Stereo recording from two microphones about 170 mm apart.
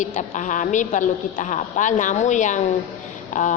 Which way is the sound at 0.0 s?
45° left (ahead or behind).